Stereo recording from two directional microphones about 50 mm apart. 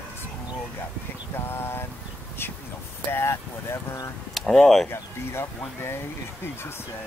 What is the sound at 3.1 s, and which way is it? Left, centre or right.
Speech, left.